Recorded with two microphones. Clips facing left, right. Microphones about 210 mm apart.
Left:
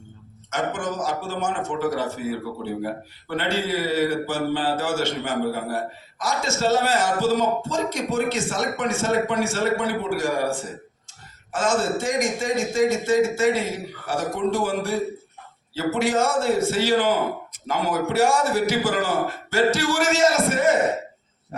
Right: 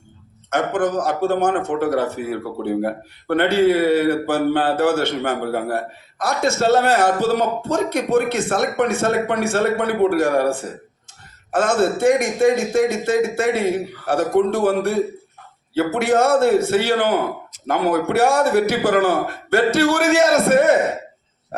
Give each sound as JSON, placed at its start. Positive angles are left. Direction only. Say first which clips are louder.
{"t": 0.5, "sound": "a man's voice", "louder": "right 7 dB", "side_deg": -60}